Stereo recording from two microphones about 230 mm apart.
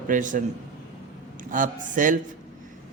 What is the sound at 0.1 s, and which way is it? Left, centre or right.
Speech, right.